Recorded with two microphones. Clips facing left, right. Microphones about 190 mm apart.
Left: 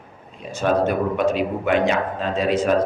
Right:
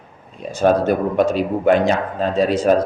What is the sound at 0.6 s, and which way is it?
A man's voice, 40° right (ahead or behind).